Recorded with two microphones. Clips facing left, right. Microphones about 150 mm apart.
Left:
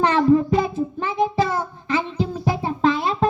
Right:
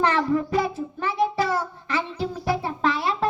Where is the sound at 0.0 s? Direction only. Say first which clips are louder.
Left 6 dB; 20° left (ahead or behind).